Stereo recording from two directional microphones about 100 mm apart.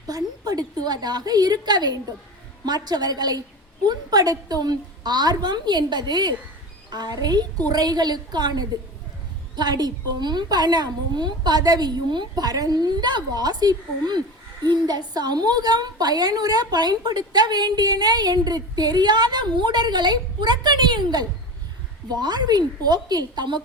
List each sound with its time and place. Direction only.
0.1 s a woman's voice: 40° right (ahead or behind)